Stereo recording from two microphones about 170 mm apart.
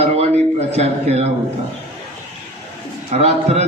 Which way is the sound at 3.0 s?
40° right (ahead or behind).